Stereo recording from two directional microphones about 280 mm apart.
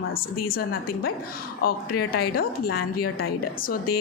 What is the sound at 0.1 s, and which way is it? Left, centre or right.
A woman's voice, left.